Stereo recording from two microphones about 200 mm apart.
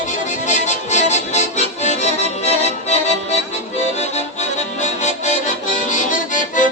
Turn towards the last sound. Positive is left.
turn(degrees=40)  # may be behind; listen again after turning